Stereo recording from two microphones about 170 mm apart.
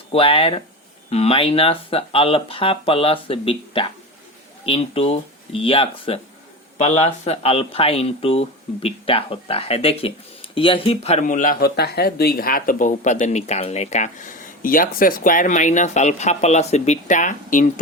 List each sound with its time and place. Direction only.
0.1 s speech: 30° left (ahead or behind); by 17.7 s 50° left (ahead or behind)